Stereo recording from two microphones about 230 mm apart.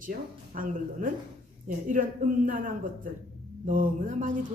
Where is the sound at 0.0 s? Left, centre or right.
Right.